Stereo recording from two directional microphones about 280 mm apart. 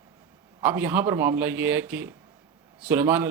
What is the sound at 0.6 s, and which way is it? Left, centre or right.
Speech, centre.